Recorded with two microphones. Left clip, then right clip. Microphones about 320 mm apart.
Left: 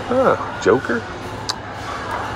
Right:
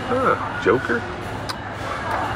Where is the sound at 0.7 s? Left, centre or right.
Centre.